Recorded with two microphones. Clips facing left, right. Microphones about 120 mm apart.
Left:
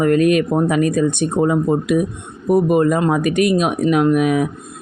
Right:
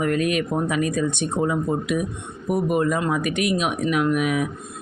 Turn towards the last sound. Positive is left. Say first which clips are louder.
# left 6 dB
turn(degrees=40)  # may be behind; listen again after turning